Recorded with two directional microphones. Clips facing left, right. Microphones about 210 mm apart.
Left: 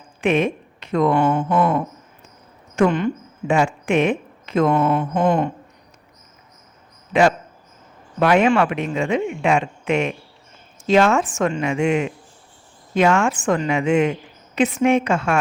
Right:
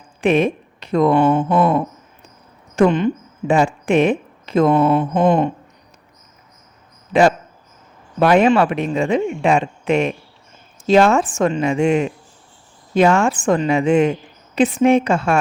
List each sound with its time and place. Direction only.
0.2 s speech: 35° right (ahead or behind)
1.1 s mantra: 20° right (ahead or behind)
3.4 s speech: 35° right (ahead or behind)
4.7 s mantra: 20° right (ahead or behind)
7.1 s a woman's voice: 35° right (ahead or behind)